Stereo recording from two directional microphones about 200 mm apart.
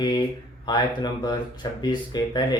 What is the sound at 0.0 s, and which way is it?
Speech, 20° left (ahead or behind).